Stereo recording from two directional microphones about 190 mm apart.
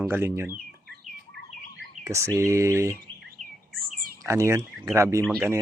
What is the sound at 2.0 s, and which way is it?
Speech, 15° right (ahead or behind).